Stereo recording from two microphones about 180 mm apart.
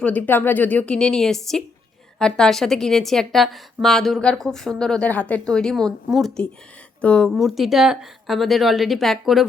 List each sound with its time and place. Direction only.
0.0 s a woman's voice: 10° left (ahead or behind)